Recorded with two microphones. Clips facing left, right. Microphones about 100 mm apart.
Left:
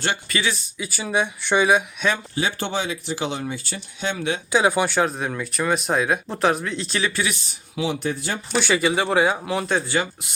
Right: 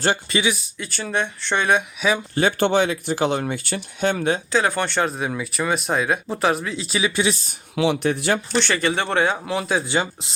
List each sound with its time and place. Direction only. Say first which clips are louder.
0.3 s speech: right 3 dB; 20° right (ahead or behind)
0.5 s speech: left 1 dB; 5° right (ahead or behind)
0.9 s speech: left 1 dB; 10° left (ahead or behind)
2.0 s speech: right 2 dB; 5° right (ahead or behind)
2.3 s speech: right 6 dB; 55° right (ahead or behind)
4.5 s speech: left 5 dB; 15° left (ahead or behind); by 7.1 s 5° right (ahead or behind)
7.8 s speech: right 5 dB; 70° right (ahead or behind)
8.5 s speech: left 1 dB; 5° left (ahead or behind)
9.8 s speech: right 1 dB; 25° right (ahead or behind)